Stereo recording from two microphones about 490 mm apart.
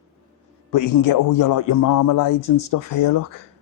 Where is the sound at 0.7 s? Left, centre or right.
Left.